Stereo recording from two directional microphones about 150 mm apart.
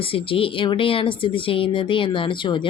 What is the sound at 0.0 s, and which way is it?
Speech, 35° left (ahead or behind).